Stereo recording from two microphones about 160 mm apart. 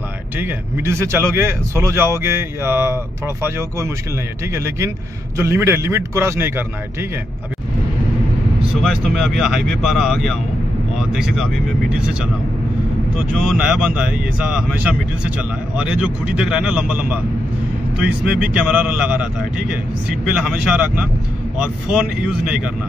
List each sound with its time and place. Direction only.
0.4 s speech: 15° right (ahead or behind)
8.8 s speech: centre (ahead or behind)
13.3 s speech: 5° right (ahead or behind)
20.3 s speech: 5° right (ahead or behind)